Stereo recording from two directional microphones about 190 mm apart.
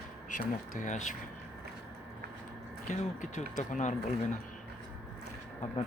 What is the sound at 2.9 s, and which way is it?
Speech, 40° left (ahead or behind).